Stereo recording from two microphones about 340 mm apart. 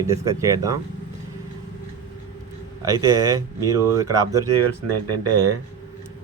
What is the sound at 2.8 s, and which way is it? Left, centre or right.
Speech, centre.